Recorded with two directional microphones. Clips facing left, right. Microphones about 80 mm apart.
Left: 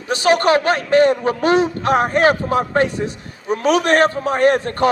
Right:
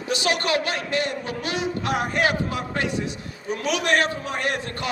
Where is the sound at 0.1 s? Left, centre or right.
Left.